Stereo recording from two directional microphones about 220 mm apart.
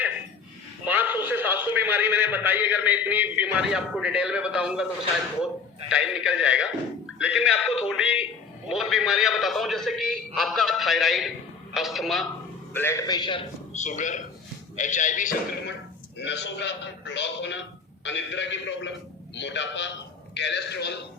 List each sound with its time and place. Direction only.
0.9 s a man's voice: 10° right (ahead or behind)
5.9 s a man's voice: 5° right (ahead or behind)
12.7 s a man's voice: 10° left (ahead or behind)
13.7 s speech: 35° left (ahead or behind)
16.1 s a man's voice: 50° left (ahead or behind)